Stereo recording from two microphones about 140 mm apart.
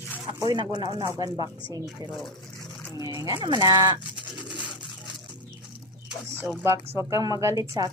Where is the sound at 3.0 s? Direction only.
25° right (ahead or behind).